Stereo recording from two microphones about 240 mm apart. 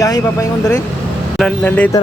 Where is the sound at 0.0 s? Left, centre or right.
Centre.